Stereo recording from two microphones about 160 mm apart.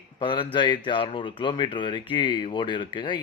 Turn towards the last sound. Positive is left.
turn(degrees=30)  # may be behind; listen again after turning